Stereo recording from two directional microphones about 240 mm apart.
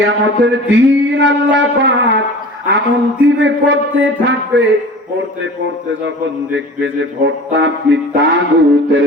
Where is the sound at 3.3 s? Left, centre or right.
Right.